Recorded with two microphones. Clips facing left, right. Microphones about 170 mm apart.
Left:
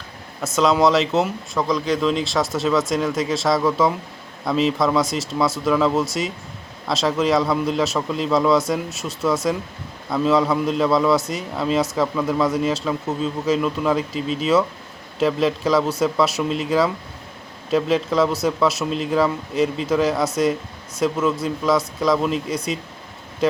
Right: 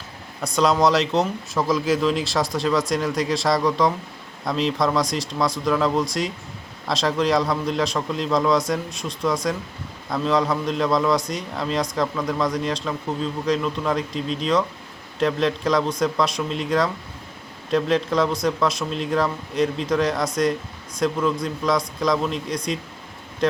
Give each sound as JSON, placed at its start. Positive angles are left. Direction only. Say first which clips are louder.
{"t": 0.4, "sound": "a man's voice", "louder": "left 2 dB", "side_deg": 0}